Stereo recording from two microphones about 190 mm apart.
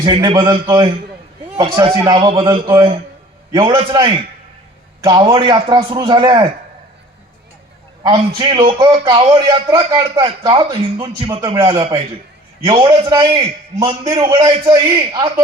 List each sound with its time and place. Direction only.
0.0 s a man's voice: 25° right (ahead or behind)
8.4 s a man's voice: 25° right (ahead or behind)